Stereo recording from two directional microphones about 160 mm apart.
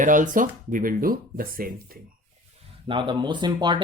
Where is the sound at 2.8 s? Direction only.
30° right (ahead or behind).